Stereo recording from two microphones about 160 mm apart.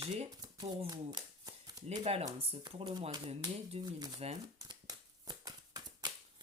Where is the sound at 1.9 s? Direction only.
40° right (ahead or behind).